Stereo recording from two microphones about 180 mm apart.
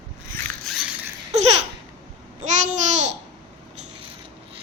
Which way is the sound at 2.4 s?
40° right (ahead or behind).